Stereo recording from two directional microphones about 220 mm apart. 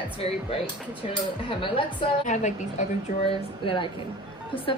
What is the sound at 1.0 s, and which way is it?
A woman's voice, 25° left (ahead or behind).